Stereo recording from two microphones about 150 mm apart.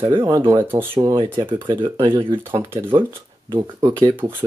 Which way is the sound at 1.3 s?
30° right (ahead or behind).